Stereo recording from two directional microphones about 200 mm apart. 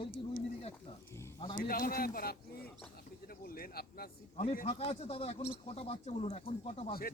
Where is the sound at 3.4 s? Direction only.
50° left (ahead or behind).